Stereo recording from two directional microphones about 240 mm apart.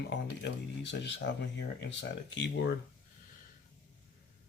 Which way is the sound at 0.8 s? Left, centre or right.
Left.